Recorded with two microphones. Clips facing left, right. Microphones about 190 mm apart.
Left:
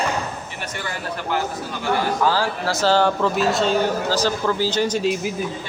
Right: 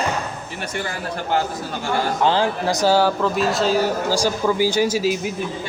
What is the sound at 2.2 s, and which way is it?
Speech, 20° right (ahead or behind).